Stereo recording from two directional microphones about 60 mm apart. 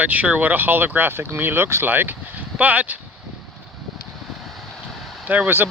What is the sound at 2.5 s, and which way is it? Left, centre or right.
Speech, right.